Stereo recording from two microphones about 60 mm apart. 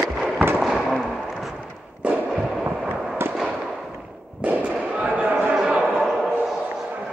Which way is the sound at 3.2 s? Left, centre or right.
Right.